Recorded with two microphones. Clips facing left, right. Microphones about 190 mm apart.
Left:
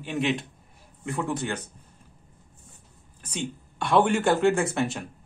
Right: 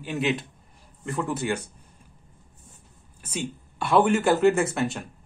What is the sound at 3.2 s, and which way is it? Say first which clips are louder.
Speech: right 1 dB; 5° right (ahead or behind).